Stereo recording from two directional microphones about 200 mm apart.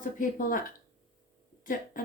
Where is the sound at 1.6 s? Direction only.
40° left (ahead or behind).